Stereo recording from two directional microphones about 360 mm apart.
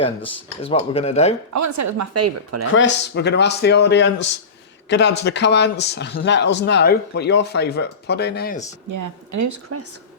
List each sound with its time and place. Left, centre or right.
0.6 s speech: centre
1.5 s a woman's voice: right
2.7 s speech: left
8.9 s a woman's voice: right